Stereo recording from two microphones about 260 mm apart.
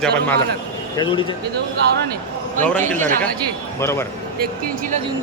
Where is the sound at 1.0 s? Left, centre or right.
Centre.